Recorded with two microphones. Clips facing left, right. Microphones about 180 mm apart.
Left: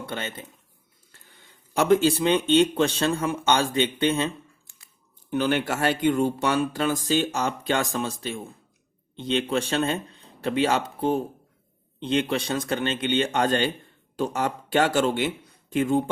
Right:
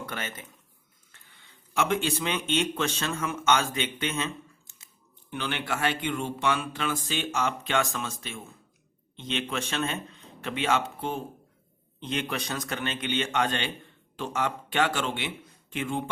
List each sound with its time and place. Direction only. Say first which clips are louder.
0.0 s speech: left 4 dB; 30° left (ahead or behind)
1.1 s speech: left 4 dB; 40° left (ahead or behind)
5.3 s speech: left 8 dB; 40° left (ahead or behind)